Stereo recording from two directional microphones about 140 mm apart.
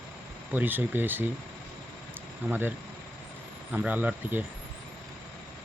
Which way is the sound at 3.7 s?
10° right (ahead or behind).